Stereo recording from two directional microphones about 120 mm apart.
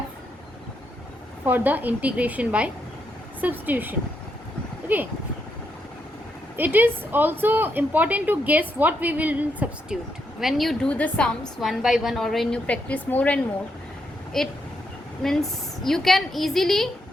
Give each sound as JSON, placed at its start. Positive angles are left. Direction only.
{"t": 1.5, "sound": "speech", "side_deg": -15}
{"t": 6.6, "sound": "speech", "side_deg": -15}
{"t": 10.4, "sound": "a woman's voice", "side_deg": 0}
{"t": 11.6, "sound": "a woman's voice", "side_deg": 0}
{"t": 12.6, "sound": "a woman's voice", "side_deg": 10}